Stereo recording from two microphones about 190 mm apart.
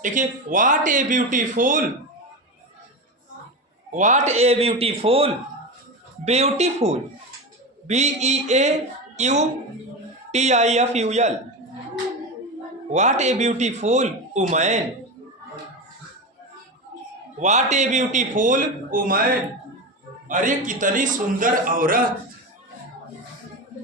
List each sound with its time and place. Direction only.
0.0 s speech: 40° right (ahead or behind)
3.9 s a man's voice: 40° right (ahead or behind)
12.9 s a man's voice: 40° right (ahead or behind)
17.4 s a man's voice: 35° right (ahead or behind)
20.2 s speech: 45° right (ahead or behind)